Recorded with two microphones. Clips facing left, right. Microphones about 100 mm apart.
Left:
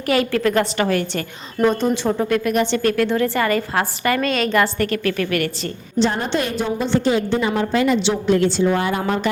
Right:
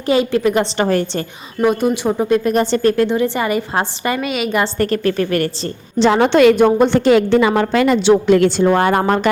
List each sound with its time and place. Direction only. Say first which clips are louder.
0.0 s a woman's voice: right 3 dB; 20° right (ahead or behind)
1.6 s speech: right 2 dB; 10° right (ahead or behind)
2.4 s a woman's voice: right 4 dB; 35° right (ahead or behind); by 4.6 s 10° right (ahead or behind)
4.6 s a woman's voice: right 3 dB; 35° right (ahead or behind)
6.0 s a woman's voice: right 9 dB; 75° right (ahead or behind)
6.7 s a woman's voice: right 7 dB; 55° right (ahead or behind)